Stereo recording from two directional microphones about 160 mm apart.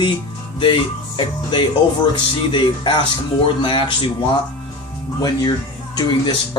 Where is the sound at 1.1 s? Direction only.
30° left (ahead or behind).